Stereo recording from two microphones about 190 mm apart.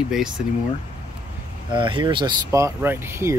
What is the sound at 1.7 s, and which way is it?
Speech, 25° right (ahead or behind).